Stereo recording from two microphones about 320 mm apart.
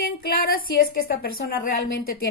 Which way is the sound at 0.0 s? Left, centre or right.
Left.